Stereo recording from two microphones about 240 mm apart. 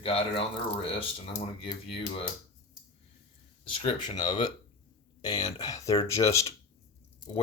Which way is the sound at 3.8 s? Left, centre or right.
Centre.